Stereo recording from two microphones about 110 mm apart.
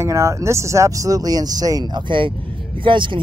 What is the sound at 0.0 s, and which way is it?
Speech, 25° right (ahead or behind).